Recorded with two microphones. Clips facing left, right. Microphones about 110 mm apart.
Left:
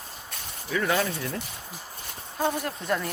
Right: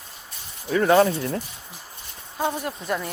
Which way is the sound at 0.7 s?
35° right (ahead or behind).